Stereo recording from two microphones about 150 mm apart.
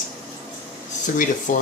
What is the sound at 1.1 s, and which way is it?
Speech, 60° left (ahead or behind).